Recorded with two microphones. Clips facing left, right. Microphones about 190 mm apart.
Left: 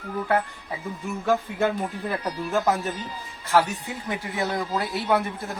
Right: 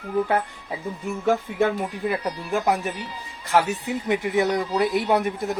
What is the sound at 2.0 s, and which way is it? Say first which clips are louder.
Speech: right 5 dB; 15° right (ahead or behind).